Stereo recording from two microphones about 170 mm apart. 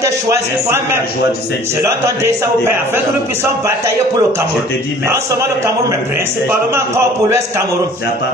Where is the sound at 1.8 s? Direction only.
15° right (ahead or behind).